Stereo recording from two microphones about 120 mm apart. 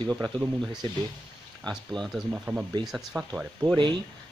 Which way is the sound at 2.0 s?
5° right (ahead or behind).